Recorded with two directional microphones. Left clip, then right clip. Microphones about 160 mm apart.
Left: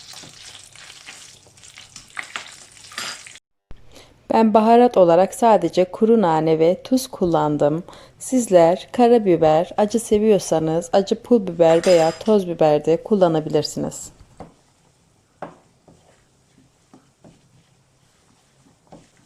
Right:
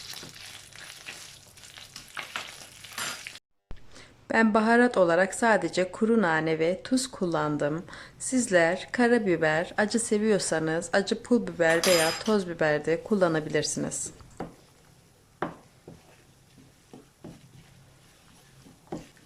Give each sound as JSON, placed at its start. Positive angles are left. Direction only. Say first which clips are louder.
{"t": 4.0, "sound": "a woman's voice", "louder": "left 7 dB", "side_deg": 15}